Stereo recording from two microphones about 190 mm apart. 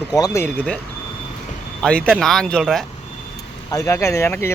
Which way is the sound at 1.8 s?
5° left (ahead or behind).